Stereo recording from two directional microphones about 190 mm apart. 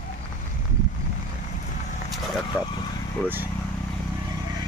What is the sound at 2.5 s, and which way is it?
Vehicle, 10° right (ahead or behind).